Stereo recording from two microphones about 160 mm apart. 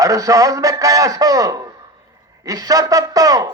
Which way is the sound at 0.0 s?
20° right (ahead or behind).